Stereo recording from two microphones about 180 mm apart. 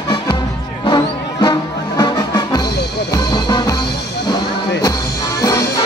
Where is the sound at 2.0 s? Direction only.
25° left (ahead or behind).